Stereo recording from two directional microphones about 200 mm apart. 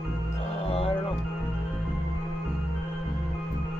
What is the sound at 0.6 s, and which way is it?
Music, 30° left (ahead or behind).